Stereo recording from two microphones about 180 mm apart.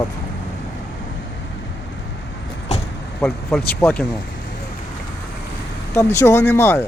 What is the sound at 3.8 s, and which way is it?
Speech, 10° left (ahead or behind).